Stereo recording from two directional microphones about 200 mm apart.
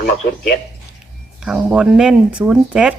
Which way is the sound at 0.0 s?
50° left (ahead or behind).